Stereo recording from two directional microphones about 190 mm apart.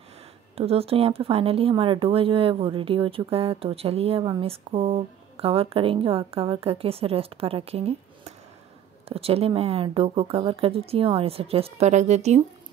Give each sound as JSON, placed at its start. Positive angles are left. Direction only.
{"t": 0.6, "sound": "speech", "side_deg": -30}